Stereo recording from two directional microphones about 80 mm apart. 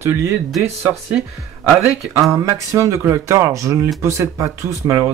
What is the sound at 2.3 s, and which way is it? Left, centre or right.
Speech, right.